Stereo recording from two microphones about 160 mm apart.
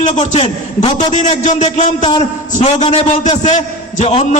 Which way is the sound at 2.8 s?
30° left (ahead or behind).